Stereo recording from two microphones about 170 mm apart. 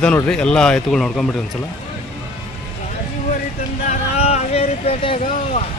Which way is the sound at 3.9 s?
40° left (ahead or behind).